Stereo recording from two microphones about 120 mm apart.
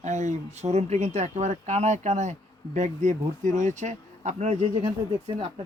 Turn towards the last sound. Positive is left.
turn(degrees=-40)  # may be behind; listen again after turning